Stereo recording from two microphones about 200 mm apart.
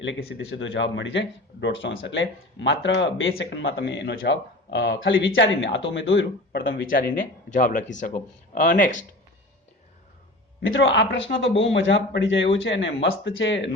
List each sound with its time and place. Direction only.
0.0 s speech: 65° left (ahead or behind)
5.9 s speech: 60° left (ahead or behind)
6.6 s speech: 50° left (ahead or behind)
10.6 s speech: 75° left (ahead or behind)